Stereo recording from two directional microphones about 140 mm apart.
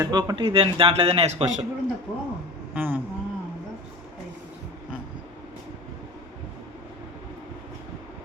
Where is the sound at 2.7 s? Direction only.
15° right (ahead or behind).